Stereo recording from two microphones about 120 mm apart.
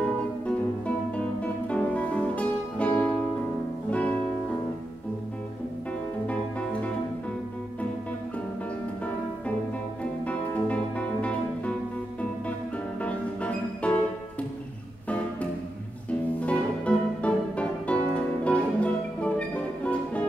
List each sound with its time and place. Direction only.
0.0 s music: 10° left (ahead or behind)
10.2 s music: 10° left (ahead or behind)
13.0 s music: 10° left (ahead or behind)
16.1 s music: 10° left (ahead or behind)